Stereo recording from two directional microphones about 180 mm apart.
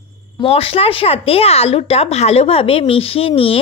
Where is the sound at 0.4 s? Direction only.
30° left (ahead or behind).